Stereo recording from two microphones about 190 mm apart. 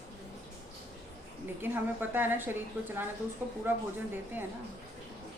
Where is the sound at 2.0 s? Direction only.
10° right (ahead or behind).